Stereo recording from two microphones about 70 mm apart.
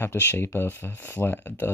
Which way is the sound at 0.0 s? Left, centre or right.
Left.